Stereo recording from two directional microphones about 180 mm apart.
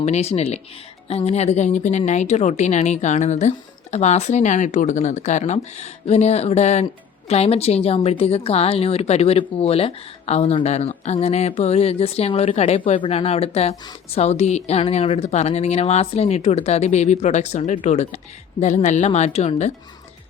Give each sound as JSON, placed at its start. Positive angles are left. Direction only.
{"t": 0.0, "sound": "a woman's voice", "side_deg": 35}